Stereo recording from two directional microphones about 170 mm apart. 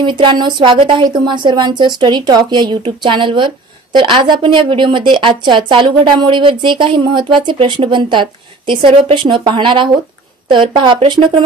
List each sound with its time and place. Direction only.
0.0 s speech: 30° right (ahead or behind)